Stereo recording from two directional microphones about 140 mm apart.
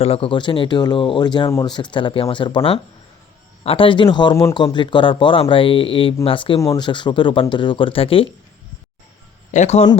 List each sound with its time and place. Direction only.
0.0 s speech: 40° left (ahead or behind)
6.6 s speech: 25° left (ahead or behind)
9.5 s a man's voice: 55° left (ahead or behind)